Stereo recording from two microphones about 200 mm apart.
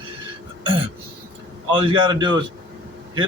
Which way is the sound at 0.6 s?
25° right (ahead or behind).